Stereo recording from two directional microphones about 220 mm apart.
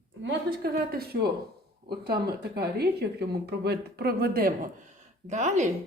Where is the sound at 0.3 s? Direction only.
45° right (ahead or behind).